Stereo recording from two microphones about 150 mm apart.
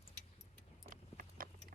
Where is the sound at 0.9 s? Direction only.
65° right (ahead or behind).